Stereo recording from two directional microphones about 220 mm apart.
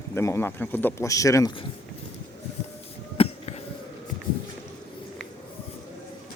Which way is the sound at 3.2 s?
25° left (ahead or behind).